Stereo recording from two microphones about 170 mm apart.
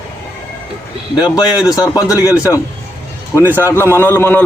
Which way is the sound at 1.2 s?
25° left (ahead or behind).